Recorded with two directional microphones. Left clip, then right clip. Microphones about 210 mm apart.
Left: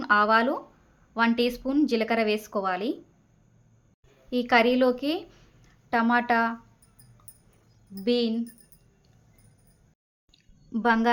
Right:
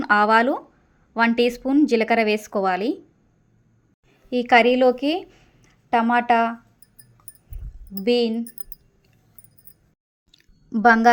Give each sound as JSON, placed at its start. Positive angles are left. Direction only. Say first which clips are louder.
{"t": 0.0, "sound": "a woman's voice", "louder": "right 4 dB", "side_deg": -20}
{"t": 4.3, "sound": "a woman's voice", "louder": "right 6 dB", "side_deg": -20}
{"t": 8.0, "sound": "a woman's voice", "louder": "right 6 dB", "side_deg": -20}
{"t": 10.3, "sound": "a sound", "louder": "right 6 dB", "side_deg": -25}